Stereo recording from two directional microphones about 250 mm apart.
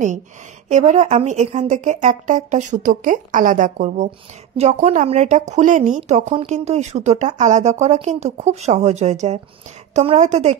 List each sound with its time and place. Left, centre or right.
0.7 s speech: right